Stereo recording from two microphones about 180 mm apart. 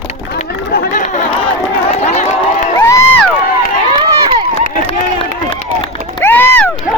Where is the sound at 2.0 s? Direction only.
35° left (ahead or behind).